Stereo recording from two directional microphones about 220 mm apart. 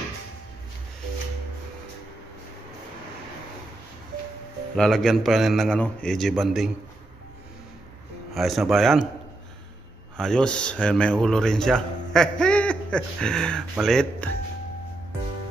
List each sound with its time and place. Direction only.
4.7 s speech: centre (ahead or behind)
8.4 s speech: centre (ahead or behind)
10.1 s speech: 5° left (ahead or behind)